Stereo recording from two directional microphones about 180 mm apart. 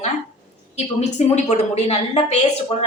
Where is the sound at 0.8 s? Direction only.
40° left (ahead or behind).